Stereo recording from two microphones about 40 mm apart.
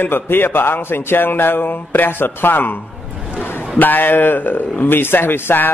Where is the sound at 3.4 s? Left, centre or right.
Left.